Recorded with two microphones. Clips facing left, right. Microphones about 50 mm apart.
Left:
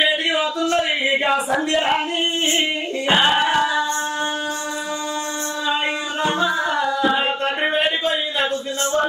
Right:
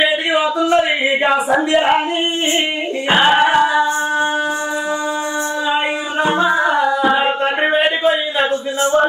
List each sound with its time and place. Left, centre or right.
0.0 s a sound: centre
3.1 s music: centre
6.2 s music: centre